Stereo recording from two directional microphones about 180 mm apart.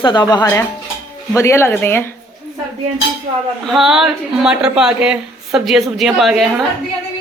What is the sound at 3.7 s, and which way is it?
A woman's voice, centre (ahead or behind).